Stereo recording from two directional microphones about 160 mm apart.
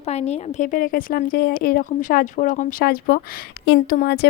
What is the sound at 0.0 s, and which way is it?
A woman's voice, 45° left (ahead or behind).